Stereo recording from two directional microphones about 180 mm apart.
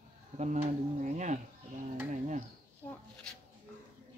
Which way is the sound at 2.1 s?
45° right (ahead or behind).